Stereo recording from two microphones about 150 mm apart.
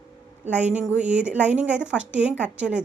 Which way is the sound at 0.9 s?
10° right (ahead or behind).